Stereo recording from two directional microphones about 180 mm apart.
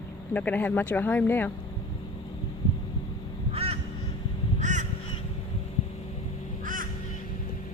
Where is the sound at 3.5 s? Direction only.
35° right (ahead or behind).